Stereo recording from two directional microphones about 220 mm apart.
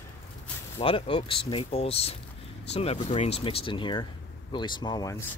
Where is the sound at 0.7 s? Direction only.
25° left (ahead or behind).